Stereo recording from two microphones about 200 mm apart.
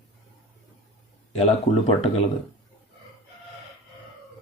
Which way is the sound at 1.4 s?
30° left (ahead or behind).